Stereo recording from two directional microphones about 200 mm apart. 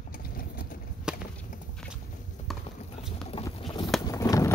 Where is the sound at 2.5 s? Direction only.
Centre (ahead or behind).